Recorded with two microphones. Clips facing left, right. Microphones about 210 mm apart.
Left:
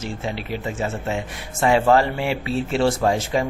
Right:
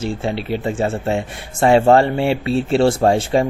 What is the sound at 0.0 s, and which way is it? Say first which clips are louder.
Speech: right 6 dB; 30° right (ahead or behind).